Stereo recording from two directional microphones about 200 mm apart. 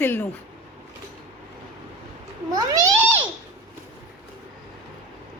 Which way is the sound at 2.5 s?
20° right (ahead or behind).